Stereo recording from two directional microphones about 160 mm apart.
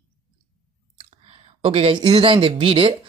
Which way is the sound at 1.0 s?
35° right (ahead or behind).